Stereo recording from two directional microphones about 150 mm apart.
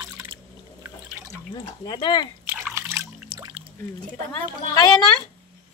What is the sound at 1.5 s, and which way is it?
Speech, 30° left (ahead or behind).